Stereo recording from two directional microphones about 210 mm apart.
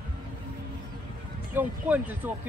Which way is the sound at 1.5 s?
10° right (ahead or behind).